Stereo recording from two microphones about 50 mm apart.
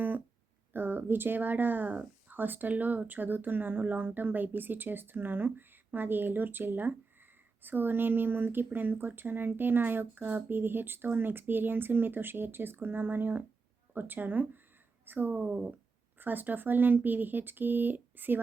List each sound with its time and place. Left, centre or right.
0.7 s speech: right
15.4 s speech: right
16.1 s speech: right